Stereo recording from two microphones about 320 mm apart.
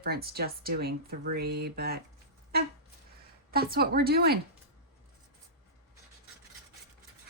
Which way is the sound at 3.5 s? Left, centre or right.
Right.